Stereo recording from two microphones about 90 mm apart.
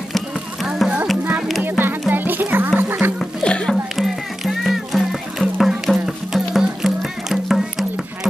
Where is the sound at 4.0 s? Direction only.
5° right (ahead or behind).